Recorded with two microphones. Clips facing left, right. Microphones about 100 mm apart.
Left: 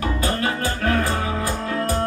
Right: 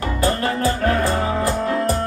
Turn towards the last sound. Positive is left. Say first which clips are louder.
# right 3 dB
turn(degrees=-35)  # may be behind; listen again after turning